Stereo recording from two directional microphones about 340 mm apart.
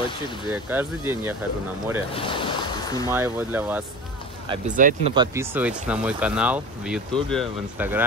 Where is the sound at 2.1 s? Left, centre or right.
Centre.